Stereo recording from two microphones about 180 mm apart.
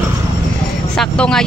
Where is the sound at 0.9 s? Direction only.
5° left (ahead or behind).